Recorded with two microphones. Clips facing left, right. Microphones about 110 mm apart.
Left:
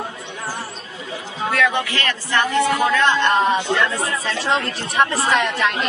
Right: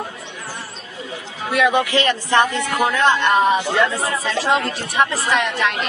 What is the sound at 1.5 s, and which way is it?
Speech, 15° right (ahead or behind).